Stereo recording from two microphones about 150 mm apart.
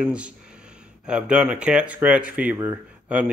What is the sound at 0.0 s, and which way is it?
A man's voice, 10° right (ahead or behind).